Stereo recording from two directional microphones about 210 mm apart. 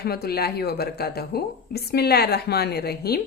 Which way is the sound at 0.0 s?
50° left (ahead or behind).